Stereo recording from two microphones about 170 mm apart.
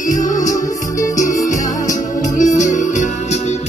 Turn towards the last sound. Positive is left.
turn(degrees=50)  # may be behind; listen again after turning